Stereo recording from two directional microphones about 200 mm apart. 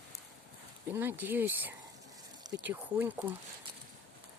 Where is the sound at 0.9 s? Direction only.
10° right (ahead or behind).